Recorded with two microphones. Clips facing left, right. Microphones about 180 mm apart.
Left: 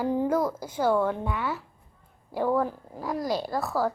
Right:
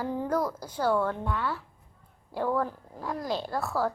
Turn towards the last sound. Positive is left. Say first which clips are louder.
# left 2 dB
turn(degrees=15)  # may be behind; listen again after turning